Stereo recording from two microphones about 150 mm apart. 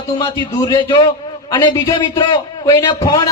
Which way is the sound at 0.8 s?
30° left (ahead or behind).